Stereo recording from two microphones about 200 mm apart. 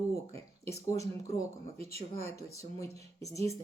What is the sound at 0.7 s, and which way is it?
Speech, 15° left (ahead or behind).